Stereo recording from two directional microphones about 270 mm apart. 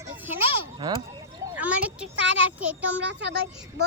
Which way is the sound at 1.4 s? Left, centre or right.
Centre.